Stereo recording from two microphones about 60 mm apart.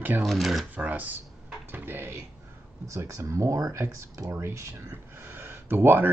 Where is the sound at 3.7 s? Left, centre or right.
Right.